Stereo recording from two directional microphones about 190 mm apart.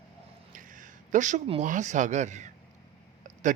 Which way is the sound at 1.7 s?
40° right (ahead or behind).